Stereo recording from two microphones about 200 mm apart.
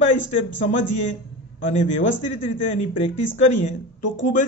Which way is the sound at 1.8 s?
35° left (ahead or behind).